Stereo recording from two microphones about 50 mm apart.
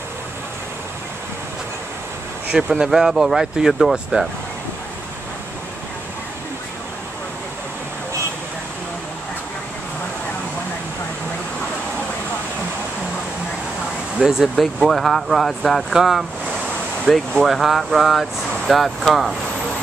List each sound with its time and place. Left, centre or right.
2.5 s speech: centre
2.9 s speech: centre
4.1 s speech: right
14.2 s speech: centre
15.9 s a sound: centre
17.1 s speech: centre